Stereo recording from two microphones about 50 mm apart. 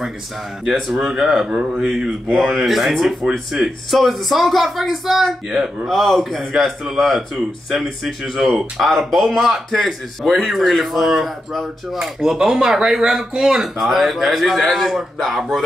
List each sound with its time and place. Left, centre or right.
0.7 s speech: centre
2.3 s speech: centre
3.3 s speech: centre
3.9 s speech: centre
5.5 s speech: centre
5.9 s speech: centre